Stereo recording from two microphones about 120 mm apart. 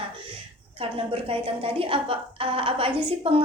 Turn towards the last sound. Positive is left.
turn(degrees=-50)  # may be behind; listen again after turning